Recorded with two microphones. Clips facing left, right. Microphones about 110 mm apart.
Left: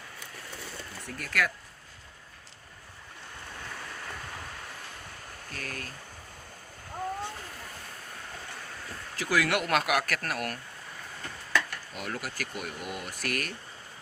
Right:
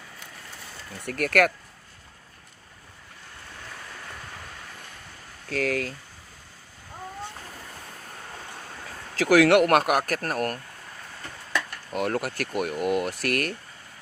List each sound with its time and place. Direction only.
1.0 s speech: 70° right (ahead or behind)
5.5 s speech: 90° right
9.1 s speech: 85° right; by 10.6 s 45° right (ahead or behind)
11.9 s speech: 55° right (ahead or behind)